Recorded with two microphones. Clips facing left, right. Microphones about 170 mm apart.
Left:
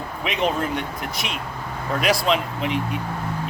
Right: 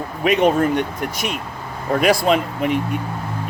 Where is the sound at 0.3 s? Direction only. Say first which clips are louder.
Right 8 dB; 45° right (ahead or behind).